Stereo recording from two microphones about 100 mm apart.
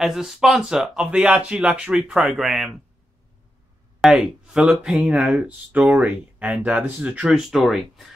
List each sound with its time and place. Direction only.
0.0 s speech: 5° right (ahead or behind)
4.0 s speech: 5° right (ahead or behind)
7.5 s speech: centre (ahead or behind)